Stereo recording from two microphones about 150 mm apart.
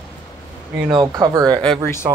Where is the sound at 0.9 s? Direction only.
25° right (ahead or behind).